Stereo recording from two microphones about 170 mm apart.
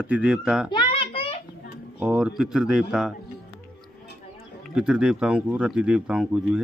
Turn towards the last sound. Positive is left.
turn(degrees=-5)  # may be behind; listen again after turning